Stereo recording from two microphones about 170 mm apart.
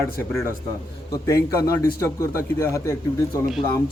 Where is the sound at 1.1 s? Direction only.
20° left (ahead or behind).